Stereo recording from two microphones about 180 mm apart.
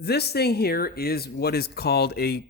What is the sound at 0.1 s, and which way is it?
Speech, 65° left (ahead or behind).